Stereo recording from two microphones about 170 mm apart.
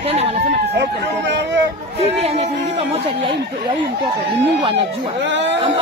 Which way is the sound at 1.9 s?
40° right (ahead or behind).